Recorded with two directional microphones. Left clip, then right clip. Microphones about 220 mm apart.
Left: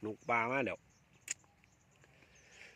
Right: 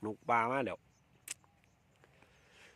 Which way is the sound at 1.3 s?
5° right (ahead or behind).